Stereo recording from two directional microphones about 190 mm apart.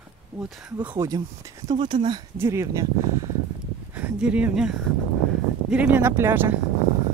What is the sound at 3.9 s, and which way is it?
Speech, 10° right (ahead or behind).